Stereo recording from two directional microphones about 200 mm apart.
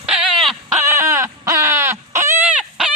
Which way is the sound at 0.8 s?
15° right (ahead or behind).